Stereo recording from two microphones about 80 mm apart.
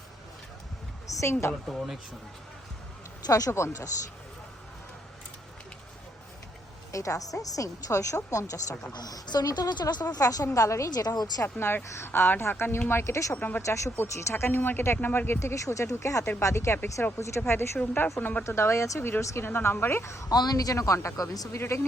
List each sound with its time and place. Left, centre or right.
1.0 s a woman's voice: left
1.6 s speech: centre
3.2 s a woman's voice: left
6.9 s a woman's voice: left
8.9 s a woman's voice: left
11.4 s a woman's voice: left
13.3 s a woman's voice: centre
13.6 s speech: left
15.4 s a woman's voice: left
18.4 s speech: left
19.5 s speech: left
20.3 s a woman's voice: left